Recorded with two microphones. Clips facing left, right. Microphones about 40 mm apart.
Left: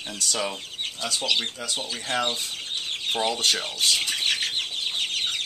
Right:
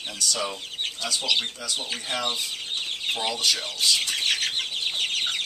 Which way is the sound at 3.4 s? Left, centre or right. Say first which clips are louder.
Left 1 dB; left.